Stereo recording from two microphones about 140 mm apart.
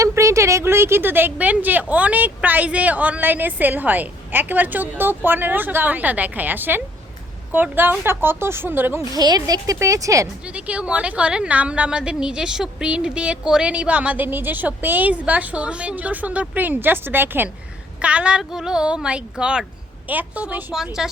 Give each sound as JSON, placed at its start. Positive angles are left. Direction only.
{"t": 0.0, "sound": "a woman's voice", "side_deg": -20}
{"t": 9.1, "sound": "speech", "side_deg": -30}
{"t": 10.4, "sound": "a woman's voice", "side_deg": -10}